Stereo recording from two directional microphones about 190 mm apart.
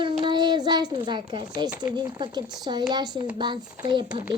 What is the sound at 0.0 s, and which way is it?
Child singing, 25° right (ahead or behind).